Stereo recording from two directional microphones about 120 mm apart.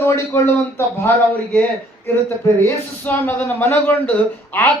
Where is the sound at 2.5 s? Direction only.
15° left (ahead or behind).